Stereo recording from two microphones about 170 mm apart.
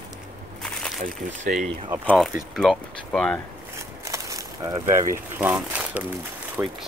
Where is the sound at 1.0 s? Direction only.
50° right (ahead or behind).